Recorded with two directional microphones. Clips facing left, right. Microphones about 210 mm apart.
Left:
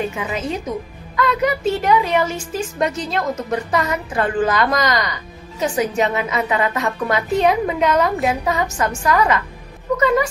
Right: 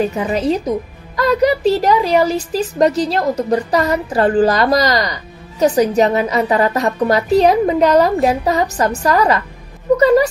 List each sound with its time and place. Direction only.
0.1 s a woman's voice: 35° right (ahead or behind)